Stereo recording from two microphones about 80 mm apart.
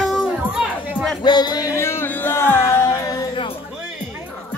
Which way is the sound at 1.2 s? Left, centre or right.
Left.